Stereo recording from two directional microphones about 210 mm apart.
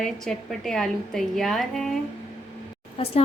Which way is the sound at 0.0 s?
Centre (ahead or behind).